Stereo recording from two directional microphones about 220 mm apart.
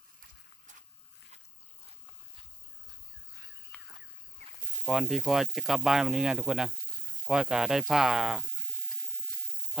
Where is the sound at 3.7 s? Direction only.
5° left (ahead or behind).